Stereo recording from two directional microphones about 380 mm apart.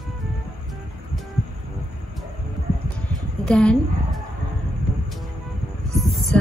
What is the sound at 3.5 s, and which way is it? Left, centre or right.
Speech, centre.